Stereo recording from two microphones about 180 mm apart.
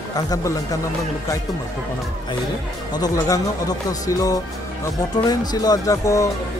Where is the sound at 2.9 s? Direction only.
20° left (ahead or behind).